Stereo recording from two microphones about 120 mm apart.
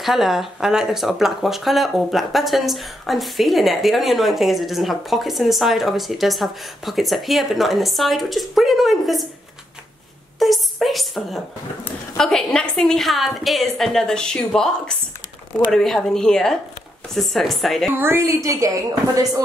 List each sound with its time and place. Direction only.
0.0 s speech: centre (ahead or behind)
10.4 s a woman's voice: centre (ahead or behind)
17.9 s a woman's voice: 20° right (ahead or behind)